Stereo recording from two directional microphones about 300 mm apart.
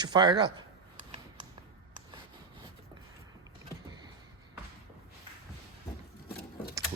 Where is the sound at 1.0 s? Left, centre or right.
Right.